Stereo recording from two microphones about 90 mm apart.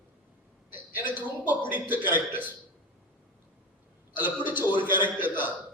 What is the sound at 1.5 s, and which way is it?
A man's voice, 20° right (ahead or behind).